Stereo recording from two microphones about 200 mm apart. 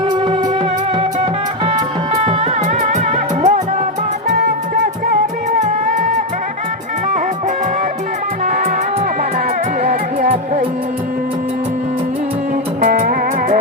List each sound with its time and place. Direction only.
0.9 s music: 25° right (ahead or behind)
4.4 s music: 50° right (ahead or behind)
6.0 s music: 40° right (ahead or behind)
8.4 s music: 45° right (ahead or behind)
9.8 s music: 40° right (ahead or behind)
12.8 s music: 45° right (ahead or behind)